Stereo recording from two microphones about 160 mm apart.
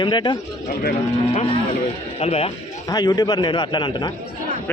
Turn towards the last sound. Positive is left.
turn(degrees=30)  # may be behind; listen again after turning